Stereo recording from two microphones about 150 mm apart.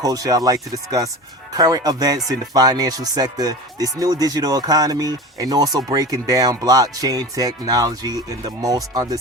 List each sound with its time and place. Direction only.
0.0 s speech: 25° right (ahead or behind)